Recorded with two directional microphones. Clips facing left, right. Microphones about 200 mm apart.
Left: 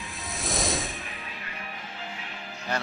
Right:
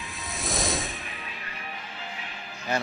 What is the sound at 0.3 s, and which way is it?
Snake, centre (ahead or behind).